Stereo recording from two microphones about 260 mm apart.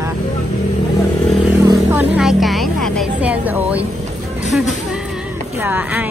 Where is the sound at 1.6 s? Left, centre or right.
Centre.